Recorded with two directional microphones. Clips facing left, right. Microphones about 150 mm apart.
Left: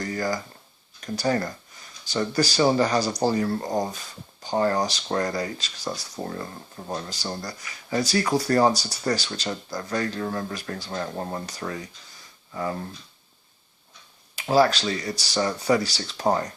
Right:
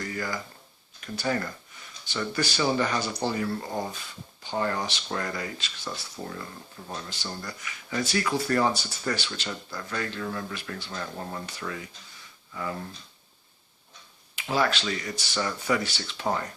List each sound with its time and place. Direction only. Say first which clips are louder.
0.0 s a sound: left 6 dB; 35° left (ahead or behind)
1.0 s speech: left 4 dB; 40° left (ahead or behind)
14.3 s speech: left 7 dB; 35° left (ahead or behind)